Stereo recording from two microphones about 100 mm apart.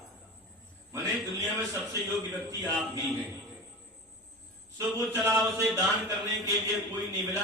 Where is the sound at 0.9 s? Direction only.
30° right (ahead or behind).